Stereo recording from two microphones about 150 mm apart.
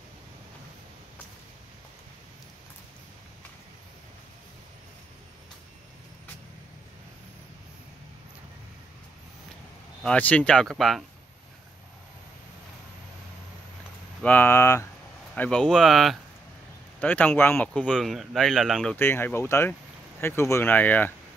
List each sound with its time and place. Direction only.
10.0 s speech: 10° left (ahead or behind)
14.2 s speech: 10° left (ahead or behind)
17.0 s speech: 10° left (ahead or behind)
18.9 s speech: 15° left (ahead or behind)